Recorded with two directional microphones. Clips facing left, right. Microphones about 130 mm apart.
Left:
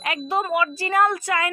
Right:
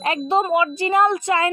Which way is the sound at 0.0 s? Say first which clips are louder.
Right 5 dB; 30° right (ahead or behind).